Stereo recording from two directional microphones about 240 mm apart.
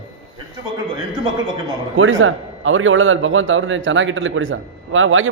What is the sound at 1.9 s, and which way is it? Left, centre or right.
A man's voice, right.